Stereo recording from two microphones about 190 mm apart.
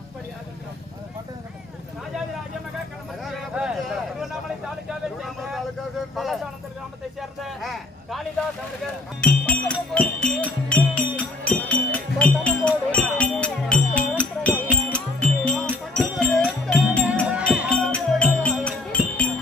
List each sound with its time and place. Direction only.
3.3 s a sound: 5° right (ahead or behind)
5.2 s vehicle: centre (ahead or behind)
6.1 s a sound: centre (ahead or behind)
9.2 s music: 5° left (ahead or behind)
17.3 s music: 5° right (ahead or behind)
17.6 s music: 5° left (ahead or behind)